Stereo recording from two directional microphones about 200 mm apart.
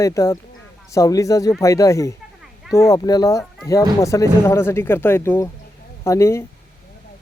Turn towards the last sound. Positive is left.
turn(degrees=15)  # may be behind; listen again after turning